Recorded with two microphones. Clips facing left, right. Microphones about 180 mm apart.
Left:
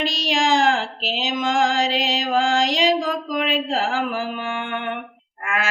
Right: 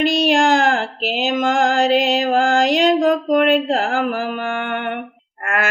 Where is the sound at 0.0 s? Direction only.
55° right (ahead or behind).